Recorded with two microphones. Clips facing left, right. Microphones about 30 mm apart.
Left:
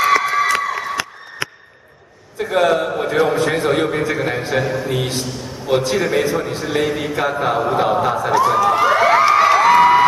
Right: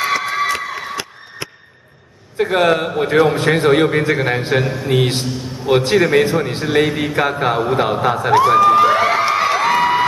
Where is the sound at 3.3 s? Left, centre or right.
Right.